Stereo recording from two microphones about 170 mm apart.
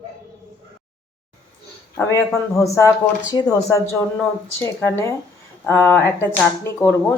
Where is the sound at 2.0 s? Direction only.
20° left (ahead or behind).